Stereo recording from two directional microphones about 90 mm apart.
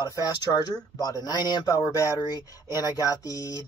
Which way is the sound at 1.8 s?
40° left (ahead or behind).